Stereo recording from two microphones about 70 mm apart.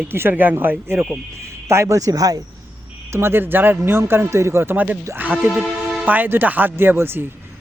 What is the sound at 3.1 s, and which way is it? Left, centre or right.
A man's voice, right.